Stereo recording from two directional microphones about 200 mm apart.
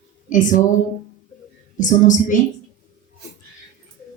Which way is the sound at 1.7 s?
40° left (ahead or behind).